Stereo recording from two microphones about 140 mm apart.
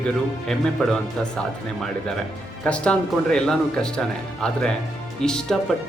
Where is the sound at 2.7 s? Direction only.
5° left (ahead or behind).